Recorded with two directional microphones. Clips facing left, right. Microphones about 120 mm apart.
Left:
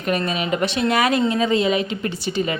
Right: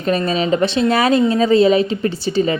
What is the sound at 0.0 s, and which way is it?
A woman's voice, 30° right (ahead or behind).